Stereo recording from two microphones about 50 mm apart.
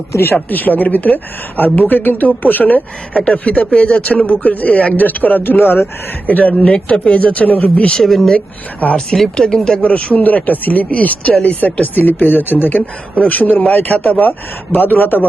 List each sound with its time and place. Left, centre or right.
0.1 s speech: left
0.5 s speech: left
3.2 s speech: centre; by 5.8 s left
6.2 s speech: left
6.5 s speech: centre
7.9 s speech: centre
8.8 s speech: left
9.3 s speech: centre
9.8 s speech: left